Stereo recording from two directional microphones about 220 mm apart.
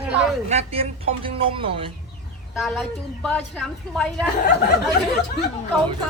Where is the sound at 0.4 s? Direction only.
30° right (ahead or behind).